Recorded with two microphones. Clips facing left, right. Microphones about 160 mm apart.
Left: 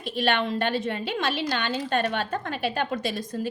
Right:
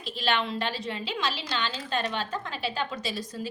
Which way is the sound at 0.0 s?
55° left (ahead or behind).